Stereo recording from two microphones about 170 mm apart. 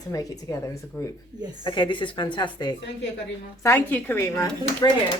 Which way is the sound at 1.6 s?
30° left (ahead or behind).